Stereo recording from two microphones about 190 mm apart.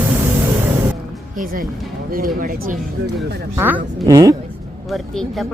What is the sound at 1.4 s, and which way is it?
Speech, 50° right (ahead or behind).